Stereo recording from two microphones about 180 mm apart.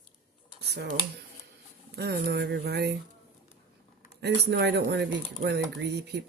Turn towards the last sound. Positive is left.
turn(degrees=-65)  # may be behind; listen again after turning